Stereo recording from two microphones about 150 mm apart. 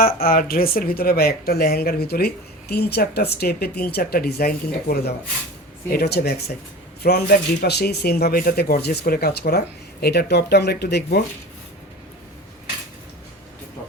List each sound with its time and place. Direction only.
0.0 s speech: 75° left (ahead or behind)